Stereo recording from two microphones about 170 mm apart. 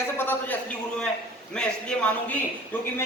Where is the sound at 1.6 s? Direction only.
5° left (ahead or behind).